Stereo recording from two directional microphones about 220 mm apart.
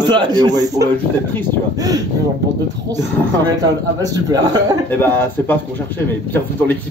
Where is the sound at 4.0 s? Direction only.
15° right (ahead or behind).